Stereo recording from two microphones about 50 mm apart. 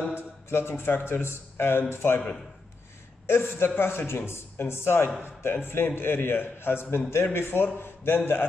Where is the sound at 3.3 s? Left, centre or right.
Left.